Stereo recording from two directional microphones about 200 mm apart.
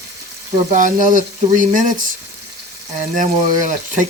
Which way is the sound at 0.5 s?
40° right (ahead or behind).